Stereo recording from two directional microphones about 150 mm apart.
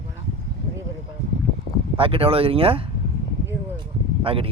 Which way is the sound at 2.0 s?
40° right (ahead or behind).